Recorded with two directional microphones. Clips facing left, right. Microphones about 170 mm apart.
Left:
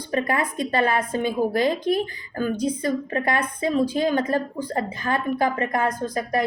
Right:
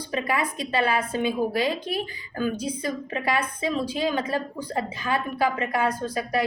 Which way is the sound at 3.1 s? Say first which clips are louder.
Left 2 dB; 50° left (ahead or behind).